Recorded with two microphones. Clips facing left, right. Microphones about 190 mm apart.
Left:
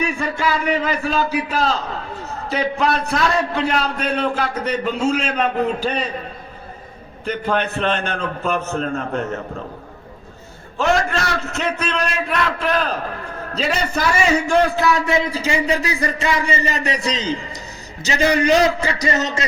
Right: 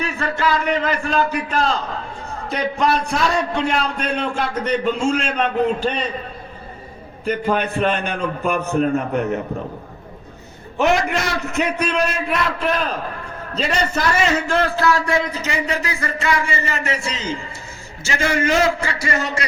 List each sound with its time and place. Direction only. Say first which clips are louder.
0.0 s a man's voice: even; 10° left (ahead or behind)
7.3 s a man's voice: right 1 dB; 5° right (ahead or behind)
10.8 s a man's voice: right 1 dB; 15° right (ahead or behind); by 19.5 s 20° left (ahead or behind)